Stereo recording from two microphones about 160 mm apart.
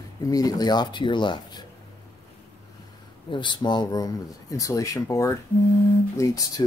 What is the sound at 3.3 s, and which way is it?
Speech, 30° left (ahead or behind).